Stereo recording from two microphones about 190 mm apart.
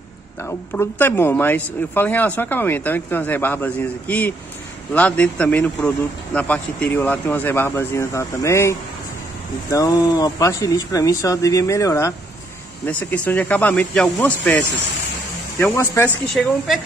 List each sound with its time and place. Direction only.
0.5 s speech: 10° left (ahead or behind)
15.6 s speech: 15° left (ahead or behind)
16.3 s a woman's voice: centre (ahead or behind)